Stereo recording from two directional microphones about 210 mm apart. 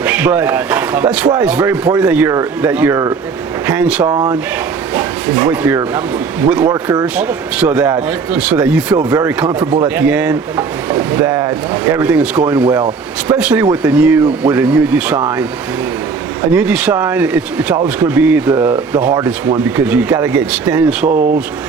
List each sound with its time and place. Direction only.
0.0 s speech: 5° right (ahead or behind)
4.0 s speech: 20° right (ahead or behind)
16.5 s speech: 5° right (ahead or behind)